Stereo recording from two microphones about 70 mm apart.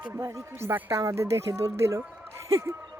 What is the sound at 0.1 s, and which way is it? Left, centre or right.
Speech, right.